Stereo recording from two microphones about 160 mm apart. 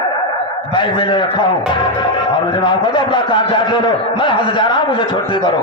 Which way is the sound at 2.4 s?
30° left (ahead or behind).